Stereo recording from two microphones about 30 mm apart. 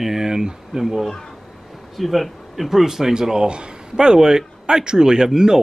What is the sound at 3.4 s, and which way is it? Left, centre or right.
A man's voice, right.